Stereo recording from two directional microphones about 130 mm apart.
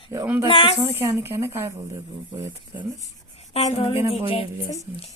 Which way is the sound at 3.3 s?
55° left (ahead or behind).